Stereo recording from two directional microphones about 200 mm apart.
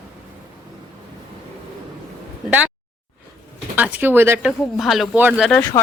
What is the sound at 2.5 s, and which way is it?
Speech, 5° right (ahead or behind).